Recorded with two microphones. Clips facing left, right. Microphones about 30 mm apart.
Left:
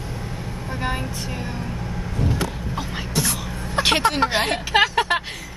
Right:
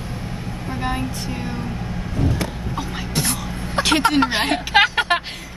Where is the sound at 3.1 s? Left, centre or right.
Right.